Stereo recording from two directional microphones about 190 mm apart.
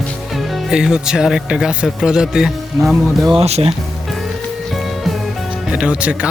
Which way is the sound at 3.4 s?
35° right (ahead or behind).